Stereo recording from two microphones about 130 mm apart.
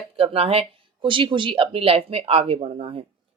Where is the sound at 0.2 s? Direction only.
50° right (ahead or behind).